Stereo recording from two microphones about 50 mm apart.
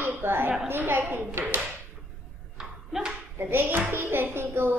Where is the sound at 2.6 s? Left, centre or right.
Centre.